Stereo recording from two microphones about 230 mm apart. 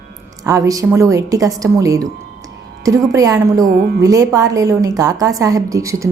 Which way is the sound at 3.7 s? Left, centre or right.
Right.